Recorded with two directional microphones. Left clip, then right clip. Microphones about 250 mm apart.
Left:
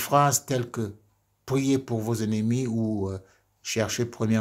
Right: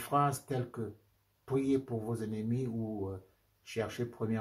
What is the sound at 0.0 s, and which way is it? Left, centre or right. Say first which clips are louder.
Speech: left 9 dB; left.